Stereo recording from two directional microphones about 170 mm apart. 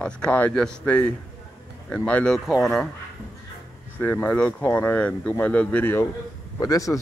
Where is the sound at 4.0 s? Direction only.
10° left (ahead or behind).